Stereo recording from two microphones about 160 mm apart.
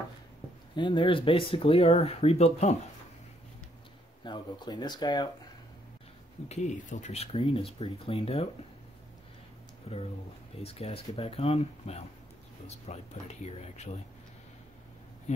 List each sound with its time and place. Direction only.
0.7 s speech: 30° left (ahead or behind)
4.2 s speech: 30° left (ahead or behind)
6.5 s speech: 50° left (ahead or behind)
9.9 s speech: 40° left (ahead or behind)
15.3 s speech: 45° left (ahead or behind)